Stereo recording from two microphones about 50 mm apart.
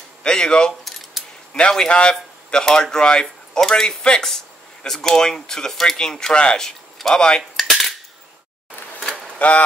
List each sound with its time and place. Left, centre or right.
0.2 s speech: centre
1.2 s keys jangling: centre
1.5 s speech: centre
7.5 s cap gun: centre
9.4 s speech: left